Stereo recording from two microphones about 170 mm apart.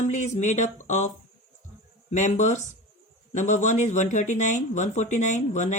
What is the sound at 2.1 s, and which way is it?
Speech, 45° left (ahead or behind).